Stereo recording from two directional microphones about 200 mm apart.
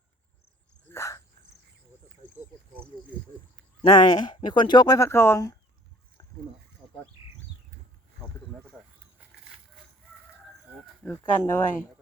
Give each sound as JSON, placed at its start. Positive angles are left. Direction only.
{"t": 0.9, "sound": "a sound", "side_deg": 15}
{"t": 3.8, "sound": "speech", "side_deg": 20}
{"t": 11.0, "sound": "speech", "side_deg": 10}